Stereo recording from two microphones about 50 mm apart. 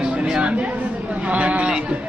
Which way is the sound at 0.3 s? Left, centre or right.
Centre.